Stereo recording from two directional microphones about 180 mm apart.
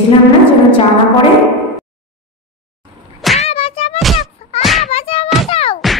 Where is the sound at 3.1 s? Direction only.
Centre (ahead or behind).